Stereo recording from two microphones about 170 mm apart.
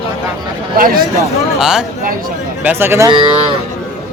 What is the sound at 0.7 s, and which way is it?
Speech, 55° right (ahead or behind).